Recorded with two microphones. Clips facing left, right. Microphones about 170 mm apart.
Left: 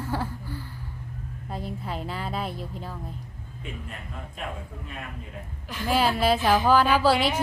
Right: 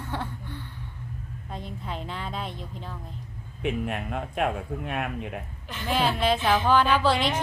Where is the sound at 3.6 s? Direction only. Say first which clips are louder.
Right 12 dB; 75° right (ahead or behind).